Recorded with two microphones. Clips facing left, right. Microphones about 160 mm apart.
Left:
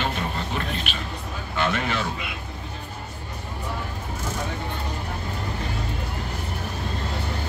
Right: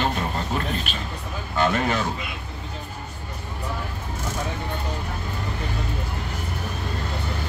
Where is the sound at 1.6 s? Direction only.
40° right (ahead or behind).